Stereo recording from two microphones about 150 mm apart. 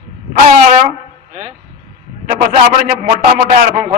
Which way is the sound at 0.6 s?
60° right (ahead or behind).